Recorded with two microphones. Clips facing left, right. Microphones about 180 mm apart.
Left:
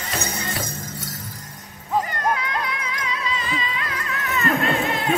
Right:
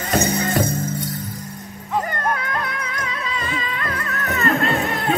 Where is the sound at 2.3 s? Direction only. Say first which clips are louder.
Even; 50° right (ahead or behind).